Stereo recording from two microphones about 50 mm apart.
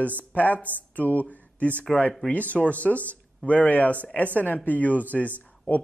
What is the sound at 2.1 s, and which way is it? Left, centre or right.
Speech, centre.